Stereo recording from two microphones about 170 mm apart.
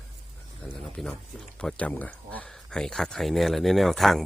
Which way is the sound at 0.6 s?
5° left (ahead or behind).